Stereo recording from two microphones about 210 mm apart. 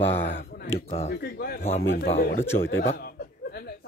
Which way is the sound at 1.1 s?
50° left (ahead or behind).